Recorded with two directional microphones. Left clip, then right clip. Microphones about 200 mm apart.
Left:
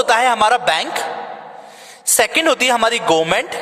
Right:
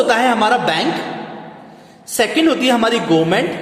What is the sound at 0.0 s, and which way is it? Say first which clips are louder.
Speech: even; 50° left (ahead or behind).